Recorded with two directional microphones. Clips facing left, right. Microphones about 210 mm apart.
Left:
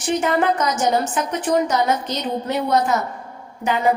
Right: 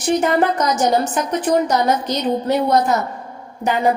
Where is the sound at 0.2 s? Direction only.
40° right (ahead or behind).